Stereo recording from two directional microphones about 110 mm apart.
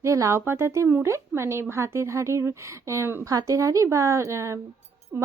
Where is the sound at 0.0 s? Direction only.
25° right (ahead or behind).